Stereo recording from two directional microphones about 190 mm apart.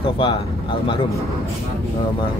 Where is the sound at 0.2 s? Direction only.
25° left (ahead or behind).